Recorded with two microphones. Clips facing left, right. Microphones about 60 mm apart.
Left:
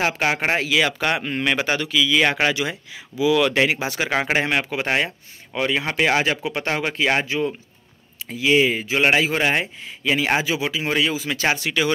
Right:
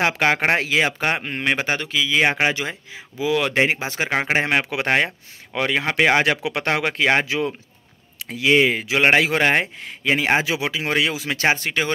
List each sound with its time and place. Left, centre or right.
0.0 s speech: right
0.7 s speech: right
3.2 s speech: right
4.1 s speech: right
4.4 s speech: right
6.2 s speech: right
10.4 s speech: right
11.5 s speech: right